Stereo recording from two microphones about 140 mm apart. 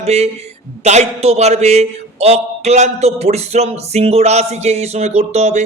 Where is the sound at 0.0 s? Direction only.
50° right (ahead or behind).